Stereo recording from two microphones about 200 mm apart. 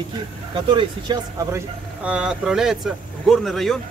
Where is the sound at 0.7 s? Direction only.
20° right (ahead or behind).